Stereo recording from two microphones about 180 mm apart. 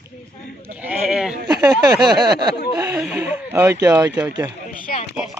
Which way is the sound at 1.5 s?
20° right (ahead or behind).